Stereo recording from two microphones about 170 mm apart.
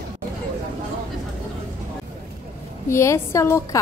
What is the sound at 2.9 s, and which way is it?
Speech, 15° left (ahead or behind).